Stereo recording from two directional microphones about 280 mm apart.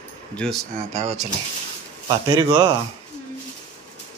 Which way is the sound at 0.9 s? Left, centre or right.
Right.